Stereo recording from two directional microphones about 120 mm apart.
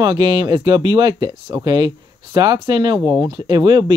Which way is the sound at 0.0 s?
35° right (ahead or behind).